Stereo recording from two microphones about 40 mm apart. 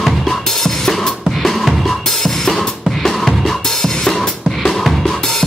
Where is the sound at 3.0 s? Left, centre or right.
Centre.